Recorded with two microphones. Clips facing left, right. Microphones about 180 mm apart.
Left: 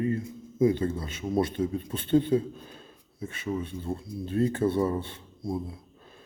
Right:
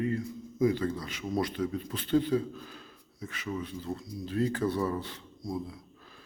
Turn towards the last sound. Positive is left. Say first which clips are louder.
# left 3 dB
turn(degrees=25)  # may be behind; listen again after turning